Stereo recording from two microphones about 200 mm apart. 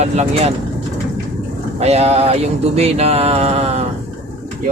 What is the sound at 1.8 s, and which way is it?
Speech, 30° right (ahead or behind).